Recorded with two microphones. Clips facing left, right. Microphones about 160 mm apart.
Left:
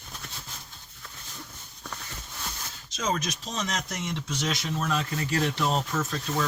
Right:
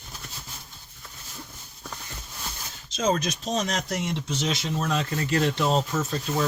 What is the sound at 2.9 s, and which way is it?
Speech, 35° right (ahead or behind).